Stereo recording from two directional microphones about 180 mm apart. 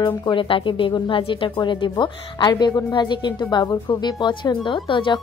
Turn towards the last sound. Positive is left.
turn(degrees=25)  # may be behind; listen again after turning